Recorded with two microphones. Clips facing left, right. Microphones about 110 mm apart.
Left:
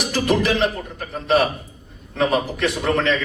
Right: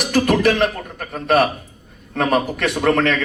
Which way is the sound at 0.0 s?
55° right (ahead or behind).